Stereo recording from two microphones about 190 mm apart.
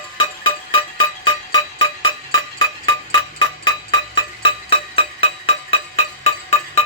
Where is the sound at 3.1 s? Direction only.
20° left (ahead or behind).